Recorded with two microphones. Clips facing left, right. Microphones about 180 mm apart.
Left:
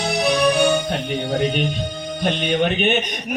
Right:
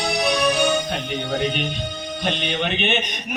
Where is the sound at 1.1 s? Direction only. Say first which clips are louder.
Left 4 dB; 45° left (ahead or behind).